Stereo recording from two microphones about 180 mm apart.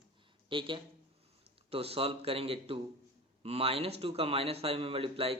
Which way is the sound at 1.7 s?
35° right (ahead or behind).